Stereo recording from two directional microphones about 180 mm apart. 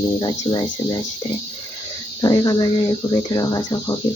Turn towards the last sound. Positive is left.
turn(degrees=20)  # may be behind; listen again after turning